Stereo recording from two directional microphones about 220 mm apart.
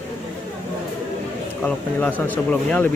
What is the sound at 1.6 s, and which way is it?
Speech, 5° left (ahead or behind).